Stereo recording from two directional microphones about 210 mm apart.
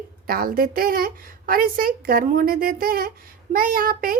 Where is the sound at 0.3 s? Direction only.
45° right (ahead or behind).